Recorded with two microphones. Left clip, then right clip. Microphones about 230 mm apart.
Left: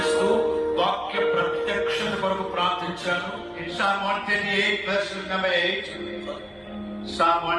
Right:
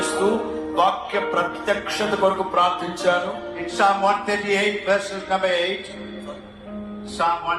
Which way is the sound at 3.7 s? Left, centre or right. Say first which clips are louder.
Right 6 dB; right.